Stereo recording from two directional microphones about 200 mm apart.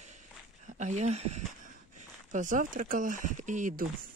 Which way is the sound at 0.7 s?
35° right (ahead or behind).